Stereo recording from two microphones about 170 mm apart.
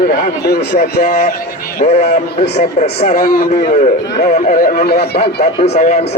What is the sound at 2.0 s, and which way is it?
Speech, 75° left (ahead or behind).